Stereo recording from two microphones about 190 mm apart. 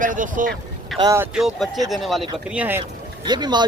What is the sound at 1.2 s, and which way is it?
Speech, 5° right (ahead or behind).